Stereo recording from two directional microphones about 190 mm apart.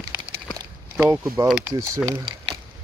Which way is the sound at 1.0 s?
15° right (ahead or behind).